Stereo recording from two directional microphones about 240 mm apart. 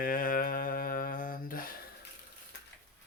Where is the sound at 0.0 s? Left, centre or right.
Left.